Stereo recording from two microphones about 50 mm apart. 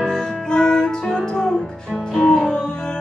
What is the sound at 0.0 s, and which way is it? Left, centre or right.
Music, centre.